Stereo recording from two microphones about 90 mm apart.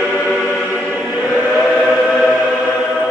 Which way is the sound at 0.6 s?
5° right (ahead or behind).